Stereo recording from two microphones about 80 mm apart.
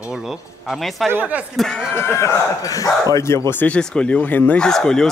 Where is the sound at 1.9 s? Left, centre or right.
Left.